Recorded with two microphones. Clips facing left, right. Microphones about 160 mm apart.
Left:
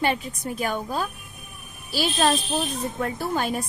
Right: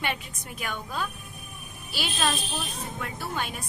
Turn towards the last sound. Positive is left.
turn(degrees=40)  # may be behind; listen again after turning